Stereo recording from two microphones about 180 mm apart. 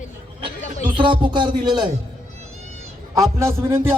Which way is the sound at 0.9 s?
30° right (ahead or behind).